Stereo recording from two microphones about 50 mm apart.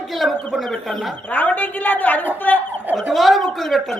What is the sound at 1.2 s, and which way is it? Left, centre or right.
A woman's voice, left.